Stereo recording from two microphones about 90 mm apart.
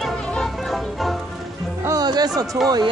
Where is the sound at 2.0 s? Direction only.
50° right (ahead or behind).